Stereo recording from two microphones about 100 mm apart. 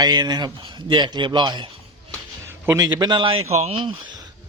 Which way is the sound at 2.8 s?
40° right (ahead or behind).